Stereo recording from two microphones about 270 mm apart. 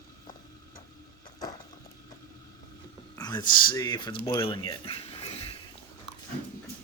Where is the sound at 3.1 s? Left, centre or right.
Centre.